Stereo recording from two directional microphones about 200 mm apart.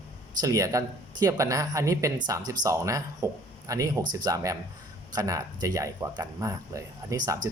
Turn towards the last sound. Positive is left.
turn(degrees=-15)  # may be behind; listen again after turning